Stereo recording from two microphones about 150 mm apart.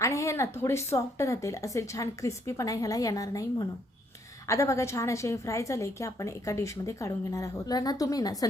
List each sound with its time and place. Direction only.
0.0 s a woman's voice: 20° left (ahead or behind)